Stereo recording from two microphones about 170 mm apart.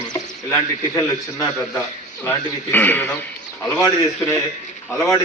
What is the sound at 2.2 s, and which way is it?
A man's voice, 10° left (ahead or behind).